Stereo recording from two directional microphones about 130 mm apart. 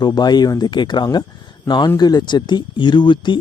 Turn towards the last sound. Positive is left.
turn(degrees=40)  # may be behind; listen again after turning